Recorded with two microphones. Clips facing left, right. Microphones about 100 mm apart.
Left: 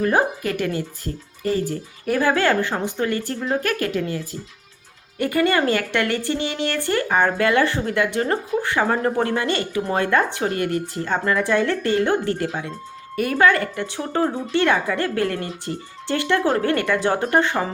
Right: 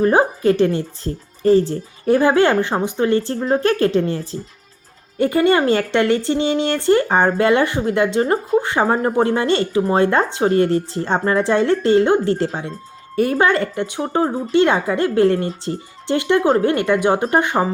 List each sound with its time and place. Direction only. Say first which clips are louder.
0.0 s speech: right 5 dB; 30° right (ahead or behind)